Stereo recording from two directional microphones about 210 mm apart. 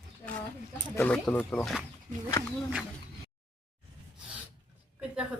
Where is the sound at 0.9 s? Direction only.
10° left (ahead or behind).